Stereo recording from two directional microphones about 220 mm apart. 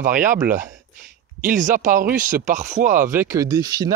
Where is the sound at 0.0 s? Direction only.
35° right (ahead or behind).